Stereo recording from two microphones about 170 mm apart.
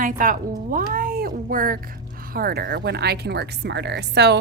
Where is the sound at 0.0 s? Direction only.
55° right (ahead or behind).